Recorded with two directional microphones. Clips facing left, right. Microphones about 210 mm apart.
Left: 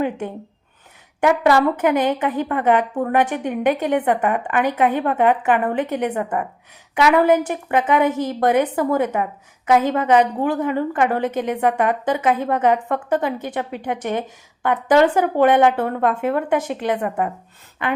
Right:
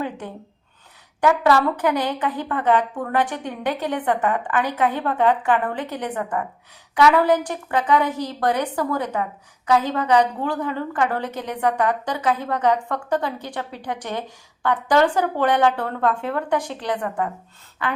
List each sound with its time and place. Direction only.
1.2 s a woman's voice: 20° left (ahead or behind)